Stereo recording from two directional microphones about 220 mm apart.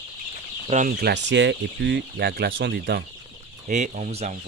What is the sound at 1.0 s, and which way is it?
Speech, 50° right (ahead or behind).